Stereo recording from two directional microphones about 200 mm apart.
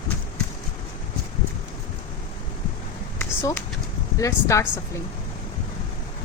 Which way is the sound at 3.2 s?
10° left (ahead or behind).